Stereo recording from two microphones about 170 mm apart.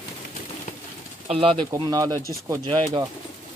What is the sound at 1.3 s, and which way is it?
Speech, 35° right (ahead or behind).